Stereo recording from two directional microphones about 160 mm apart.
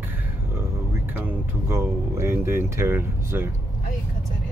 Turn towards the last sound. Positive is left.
turn(degrees=-15)  # may be behind; listen again after turning